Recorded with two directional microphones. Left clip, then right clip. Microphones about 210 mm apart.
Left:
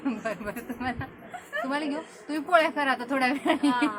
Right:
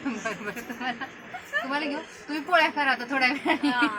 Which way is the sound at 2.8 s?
20° left (ahead or behind).